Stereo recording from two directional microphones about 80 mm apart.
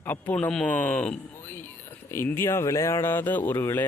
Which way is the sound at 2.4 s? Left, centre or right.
Left.